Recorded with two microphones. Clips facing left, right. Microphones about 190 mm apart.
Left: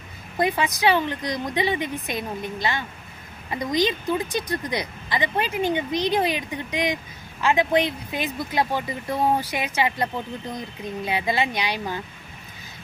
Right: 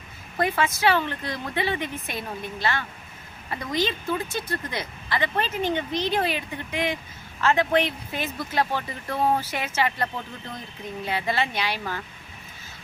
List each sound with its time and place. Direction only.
0.3 s a woman's voice: 15° left (ahead or behind)